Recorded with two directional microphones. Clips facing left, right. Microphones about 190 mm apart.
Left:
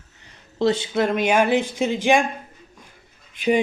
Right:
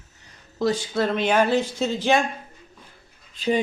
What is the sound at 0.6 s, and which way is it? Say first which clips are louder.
Speech: left 3 dB; 25° left (ahead or behind).